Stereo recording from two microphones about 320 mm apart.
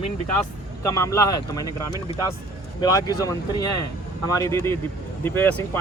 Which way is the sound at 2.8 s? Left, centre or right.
Centre.